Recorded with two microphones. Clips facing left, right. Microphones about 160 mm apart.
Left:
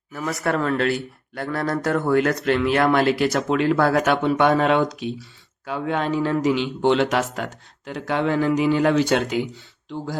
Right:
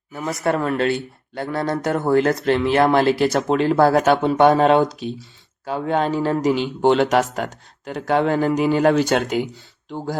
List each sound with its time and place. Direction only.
0.1 s a man's voice: 20° right (ahead or behind); by 9.5 s 45° right (ahead or behind)